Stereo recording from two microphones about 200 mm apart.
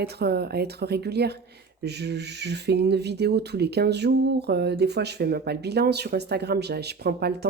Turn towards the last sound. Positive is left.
turn(degrees=-55)  # may be behind; listen again after turning